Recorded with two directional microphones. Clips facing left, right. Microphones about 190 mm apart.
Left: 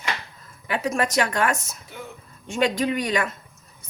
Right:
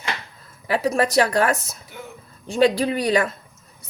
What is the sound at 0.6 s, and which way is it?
Speech, 35° right (ahead or behind).